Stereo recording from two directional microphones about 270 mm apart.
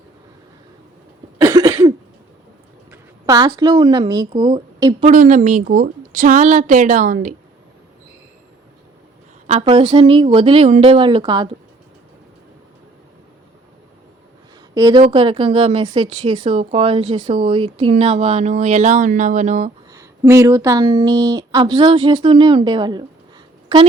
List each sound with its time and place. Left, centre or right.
1.4 s cough: centre
2.9 s a woman's voice: centre; by 7.3 s right
9.5 s a woman's voice: right
14.8 s a woman's voice: centre
19.9 s speech: centre